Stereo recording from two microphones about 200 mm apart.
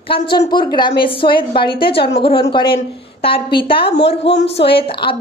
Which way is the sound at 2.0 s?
55° left (ahead or behind).